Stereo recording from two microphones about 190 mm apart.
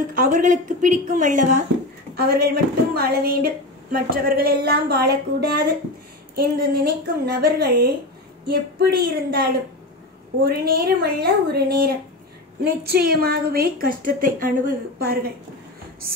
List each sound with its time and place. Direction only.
0.1 s a woman's voice: 45° right (ahead or behind)
2.1 s a woman's voice: 55° right (ahead or behind)